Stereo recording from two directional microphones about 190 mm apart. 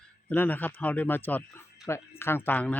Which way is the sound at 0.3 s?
10° left (ahead or behind).